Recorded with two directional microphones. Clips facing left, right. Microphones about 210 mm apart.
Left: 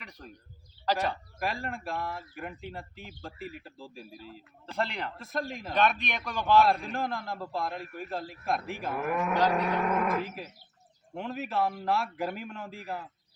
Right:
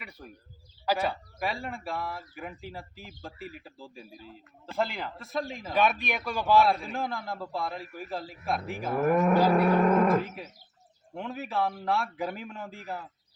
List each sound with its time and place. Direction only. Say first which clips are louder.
0.0 s a sound: right 2 dB; 10° right (ahead or behind)
0.9 s speech: right 1 dB; 10° right (ahead or behind)
9.0 s speech: right 5 dB; 40° right (ahead or behind)
11.1 s speech: even; centre (ahead or behind)